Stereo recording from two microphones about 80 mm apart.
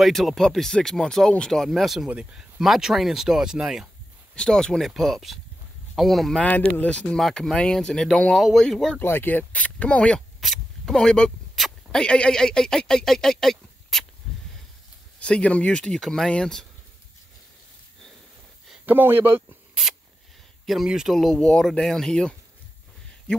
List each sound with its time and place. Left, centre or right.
0.0 s speech: centre
2.0 s speech: centre
4.4 s speech: centre
6.4 s speech: centre
7.2 s speech: centre
9.0 s speech: left
10.4 s zipper: centre
12.0 s speech: centre
15.1 s speech: centre
18.9 s speech: right
20.6 s speech: centre